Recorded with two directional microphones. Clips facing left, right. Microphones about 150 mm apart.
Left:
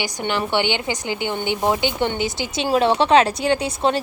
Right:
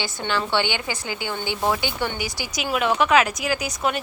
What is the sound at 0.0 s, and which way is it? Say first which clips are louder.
A woman's voice: left 2 dB; 20° left (ahead or behind).